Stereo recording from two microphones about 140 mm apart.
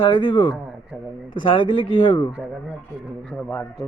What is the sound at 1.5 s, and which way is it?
Speech, 35° left (ahead or behind).